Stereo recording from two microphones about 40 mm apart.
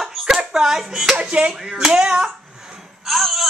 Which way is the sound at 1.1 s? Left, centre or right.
Right.